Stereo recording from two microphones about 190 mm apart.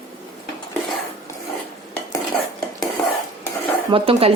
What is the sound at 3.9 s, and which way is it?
Speech, 30° right (ahead or behind).